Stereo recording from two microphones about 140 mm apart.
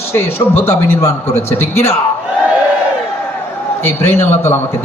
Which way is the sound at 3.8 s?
15° left (ahead or behind).